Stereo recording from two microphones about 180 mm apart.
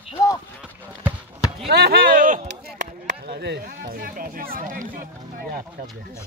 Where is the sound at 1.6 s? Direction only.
65° right (ahead or behind).